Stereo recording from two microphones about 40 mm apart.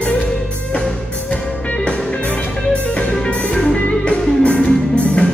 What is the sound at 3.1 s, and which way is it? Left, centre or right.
Music, centre.